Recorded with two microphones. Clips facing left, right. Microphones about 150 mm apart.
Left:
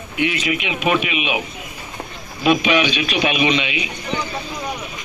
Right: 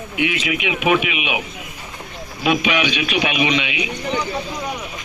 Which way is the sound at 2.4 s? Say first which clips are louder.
Left 2 dB; 10° right (ahead or behind).